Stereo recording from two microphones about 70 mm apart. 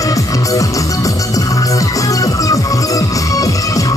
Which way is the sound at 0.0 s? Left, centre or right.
Left.